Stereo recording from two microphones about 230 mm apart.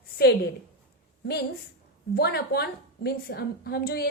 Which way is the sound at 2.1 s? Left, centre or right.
Left.